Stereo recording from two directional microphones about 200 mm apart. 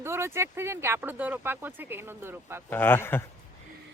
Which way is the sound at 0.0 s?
10° right (ahead or behind).